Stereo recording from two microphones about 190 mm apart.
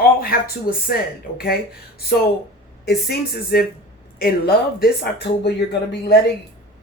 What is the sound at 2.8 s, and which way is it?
Speech, 55° left (ahead or behind).